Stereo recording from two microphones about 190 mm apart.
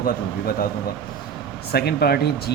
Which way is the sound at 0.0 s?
50° left (ahead or behind).